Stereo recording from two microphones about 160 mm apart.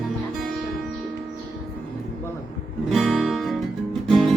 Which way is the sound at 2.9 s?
Centre (ahead or behind).